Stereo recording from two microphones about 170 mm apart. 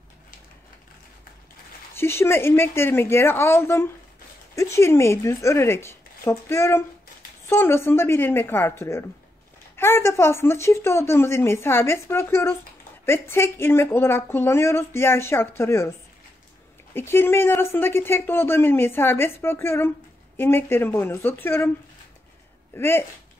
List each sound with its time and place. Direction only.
2.0 s speech: 15° left (ahead or behind)
16.9 s speech: 15° left (ahead or behind)
22.8 s speech: 15° left (ahead or behind)